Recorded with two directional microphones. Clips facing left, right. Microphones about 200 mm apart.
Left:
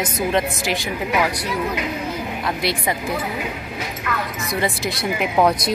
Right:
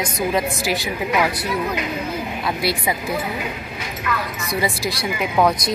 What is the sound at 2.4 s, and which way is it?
Speech, 5° right (ahead or behind).